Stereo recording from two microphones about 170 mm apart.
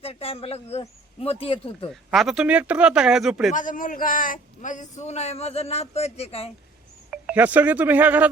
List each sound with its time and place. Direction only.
0.0 s a man's voice: 35° left (ahead or behind)
1.9 s speech: centre (ahead or behind)
3.5 s a man's voice: 50° left (ahead or behind)
7.1 s speech: 10° right (ahead or behind)